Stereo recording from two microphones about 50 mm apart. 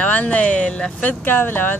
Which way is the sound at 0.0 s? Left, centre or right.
Left.